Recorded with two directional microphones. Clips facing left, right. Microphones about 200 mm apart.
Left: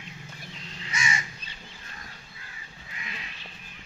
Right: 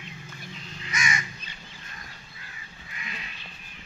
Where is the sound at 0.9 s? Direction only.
30° left (ahead or behind).